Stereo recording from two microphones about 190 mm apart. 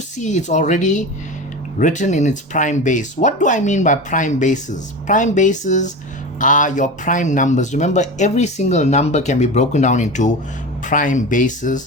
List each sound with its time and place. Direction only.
0.2 s speech: 40° left (ahead or behind)